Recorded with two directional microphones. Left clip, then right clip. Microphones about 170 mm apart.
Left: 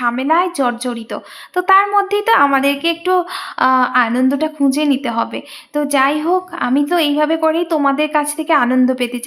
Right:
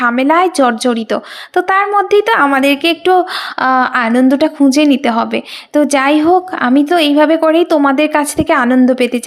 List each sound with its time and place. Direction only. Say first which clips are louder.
0.0 s a woman's voice: right 5 dB; 30° right (ahead or behind)